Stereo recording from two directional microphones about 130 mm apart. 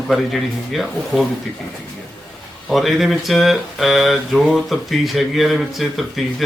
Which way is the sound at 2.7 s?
Centre (ahead or behind).